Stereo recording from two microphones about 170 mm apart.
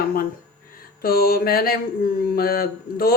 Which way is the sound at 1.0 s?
65° left (ahead or behind).